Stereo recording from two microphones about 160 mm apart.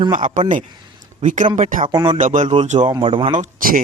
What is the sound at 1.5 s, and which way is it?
Speech, 55° right (ahead or behind).